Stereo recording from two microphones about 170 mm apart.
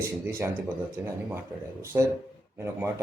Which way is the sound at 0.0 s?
15° right (ahead or behind).